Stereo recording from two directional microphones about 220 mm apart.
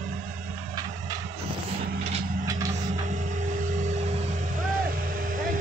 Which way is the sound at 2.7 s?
35° right (ahead or behind).